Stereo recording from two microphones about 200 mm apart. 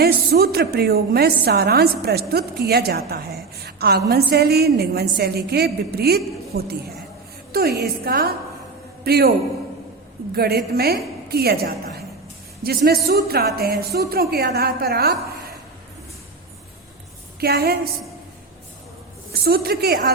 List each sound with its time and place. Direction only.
0.0 s a woman's voice: 50° right (ahead or behind)
10.3 s a woman's voice: 50° right (ahead or behind)
17.4 s a woman's voice: 50° right (ahead or behind)
19.3 s a woman's voice: 50° right (ahead or behind)